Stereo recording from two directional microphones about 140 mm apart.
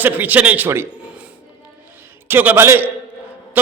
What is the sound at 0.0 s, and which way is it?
Speech, 10° right (ahead or behind).